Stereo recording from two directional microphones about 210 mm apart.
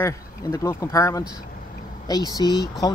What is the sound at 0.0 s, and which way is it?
Speech, 15° left (ahead or behind).